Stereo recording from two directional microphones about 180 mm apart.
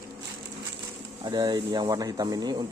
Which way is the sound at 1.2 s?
25° right (ahead or behind).